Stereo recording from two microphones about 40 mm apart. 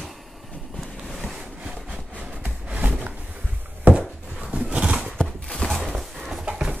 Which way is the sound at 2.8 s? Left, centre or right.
Right.